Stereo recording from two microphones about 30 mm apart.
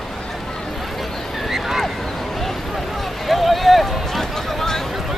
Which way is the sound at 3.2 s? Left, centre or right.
Centre.